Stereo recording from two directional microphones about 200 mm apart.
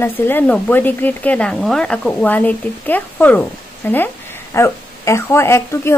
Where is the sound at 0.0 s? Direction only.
10° left (ahead or behind).